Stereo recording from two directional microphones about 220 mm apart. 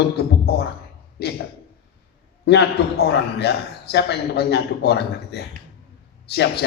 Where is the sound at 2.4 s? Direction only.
50° left (ahead or behind).